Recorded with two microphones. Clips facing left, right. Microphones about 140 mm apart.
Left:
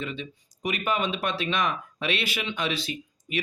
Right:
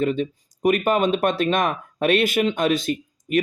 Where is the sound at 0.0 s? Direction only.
50° right (ahead or behind).